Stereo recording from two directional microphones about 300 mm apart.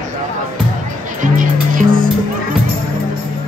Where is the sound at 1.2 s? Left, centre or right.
Right.